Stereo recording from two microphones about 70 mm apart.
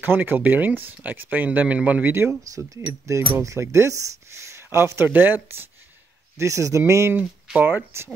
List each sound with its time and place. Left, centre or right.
0.0 s speech: right; by 2.7 s centre
3.1 s speech: right
6.3 s speech: right